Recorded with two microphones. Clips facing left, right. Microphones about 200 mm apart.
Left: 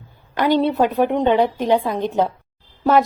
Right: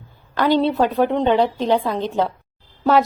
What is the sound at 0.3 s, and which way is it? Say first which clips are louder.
A woman's voice: even; 15° left (ahead or behind).